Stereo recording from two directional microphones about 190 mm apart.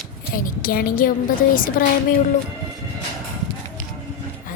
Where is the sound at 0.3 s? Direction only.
50° left (ahead or behind).